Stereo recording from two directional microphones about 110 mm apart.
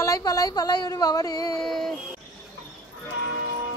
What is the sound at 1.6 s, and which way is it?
Music, 5° left (ahead or behind).